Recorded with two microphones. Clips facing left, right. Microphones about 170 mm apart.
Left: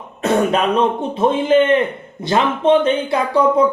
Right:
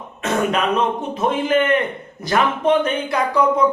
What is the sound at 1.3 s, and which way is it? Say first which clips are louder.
Speech: left 4 dB; 30° left (ahead or behind).